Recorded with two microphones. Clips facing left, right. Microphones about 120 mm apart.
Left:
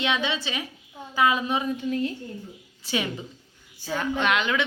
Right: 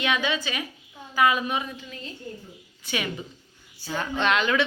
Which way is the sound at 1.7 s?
55° left (ahead or behind).